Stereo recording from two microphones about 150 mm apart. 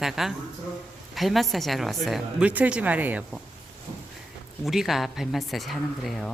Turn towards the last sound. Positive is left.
turn(degrees=0)  # may be behind; listen again after turning